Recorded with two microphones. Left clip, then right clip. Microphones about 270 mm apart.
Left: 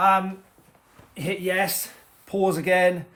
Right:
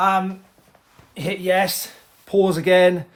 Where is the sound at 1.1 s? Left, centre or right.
Right.